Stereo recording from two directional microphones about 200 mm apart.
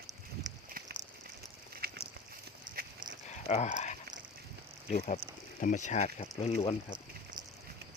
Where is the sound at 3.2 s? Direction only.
35° left (ahead or behind).